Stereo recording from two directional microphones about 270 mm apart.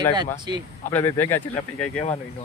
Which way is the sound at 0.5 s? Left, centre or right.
Centre.